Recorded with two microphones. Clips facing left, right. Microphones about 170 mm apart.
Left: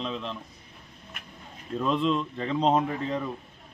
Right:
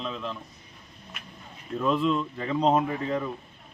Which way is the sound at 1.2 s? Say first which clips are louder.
Right 2 dB; 50° left (ahead or behind).